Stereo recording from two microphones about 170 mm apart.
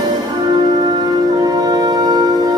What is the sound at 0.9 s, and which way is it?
Music, 25° right (ahead or behind).